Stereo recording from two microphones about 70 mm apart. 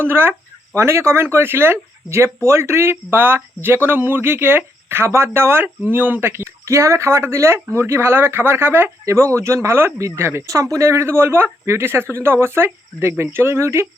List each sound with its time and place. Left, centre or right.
0.0 s speech: right
0.7 s speech: right
9.0 s speech: right